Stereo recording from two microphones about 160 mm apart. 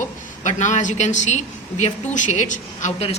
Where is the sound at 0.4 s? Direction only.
50° left (ahead or behind).